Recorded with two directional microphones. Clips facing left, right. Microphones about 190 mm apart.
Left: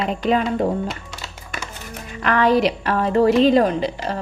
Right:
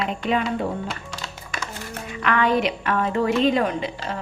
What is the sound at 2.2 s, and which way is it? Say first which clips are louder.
Speech: left 4 dB; 35° left (ahead or behind).